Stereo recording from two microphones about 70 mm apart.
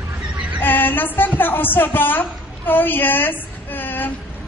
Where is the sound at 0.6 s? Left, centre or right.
Left.